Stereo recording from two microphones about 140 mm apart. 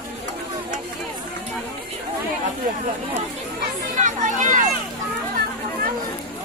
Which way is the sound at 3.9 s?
60° right (ahead or behind).